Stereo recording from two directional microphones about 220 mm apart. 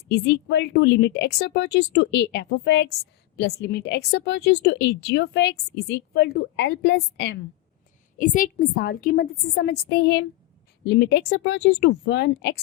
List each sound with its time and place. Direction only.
0.1 s speech: 50° left (ahead or behind)
8.2 s a woman's voice: 35° left (ahead or behind)